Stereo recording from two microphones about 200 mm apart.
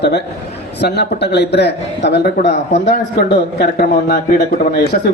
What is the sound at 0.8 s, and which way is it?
A man's voice, 55° left (ahead or behind).